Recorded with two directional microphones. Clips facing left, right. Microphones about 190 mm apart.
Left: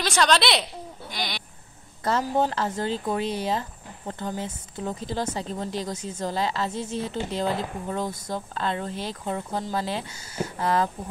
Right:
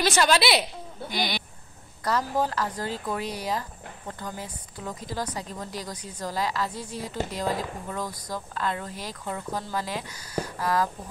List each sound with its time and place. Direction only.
0.0 s a woman's voice: 5° right (ahead or behind)
2.0 s a woman's voice: 25° left (ahead or behind)